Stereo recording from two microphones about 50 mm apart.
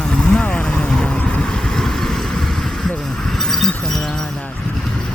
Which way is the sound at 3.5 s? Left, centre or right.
Centre.